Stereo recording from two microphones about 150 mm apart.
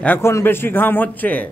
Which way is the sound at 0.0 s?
15° left (ahead or behind).